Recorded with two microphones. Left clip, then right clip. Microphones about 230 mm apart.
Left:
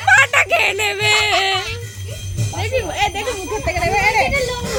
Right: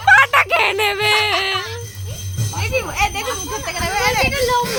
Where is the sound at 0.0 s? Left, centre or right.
Centre.